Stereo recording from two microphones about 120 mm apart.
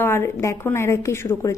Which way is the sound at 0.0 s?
20° left (ahead or behind).